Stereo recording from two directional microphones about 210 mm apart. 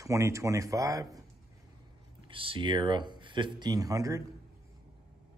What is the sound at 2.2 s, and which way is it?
Speech, 25° right (ahead or behind).